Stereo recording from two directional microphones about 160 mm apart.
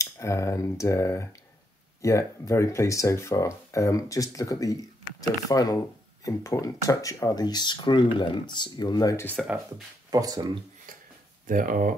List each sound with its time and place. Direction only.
0.0 s speech: 20° left (ahead or behind)
9.4 s speech: centre (ahead or behind)
10.1 s speech: 25° right (ahead or behind)
10.9 s a sound: 60° right (ahead or behind)
11.4 s speech: 60° right (ahead or behind)